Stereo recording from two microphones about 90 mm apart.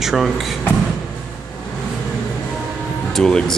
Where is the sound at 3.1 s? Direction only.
5° left (ahead or behind).